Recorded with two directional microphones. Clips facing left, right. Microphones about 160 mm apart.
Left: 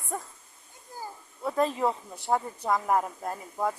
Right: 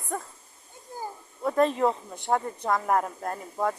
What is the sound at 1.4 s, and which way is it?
Speech, 5° left (ahead or behind).